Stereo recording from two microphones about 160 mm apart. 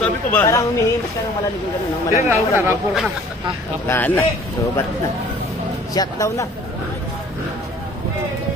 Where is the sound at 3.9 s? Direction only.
10° left (ahead or behind).